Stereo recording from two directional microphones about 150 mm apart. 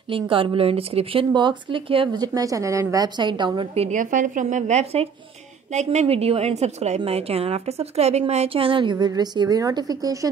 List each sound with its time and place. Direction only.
0.1 s speech: 35° right (ahead or behind)
4.0 s a woman's voice: 60° right (ahead or behind); by 10.3 s 25° right (ahead or behind)